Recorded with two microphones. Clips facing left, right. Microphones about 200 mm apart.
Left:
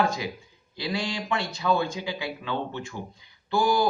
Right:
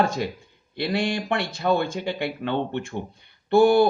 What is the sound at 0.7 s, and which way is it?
Speech, 60° right (ahead or behind).